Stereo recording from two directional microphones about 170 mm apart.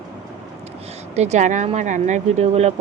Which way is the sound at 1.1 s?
40° right (ahead or behind).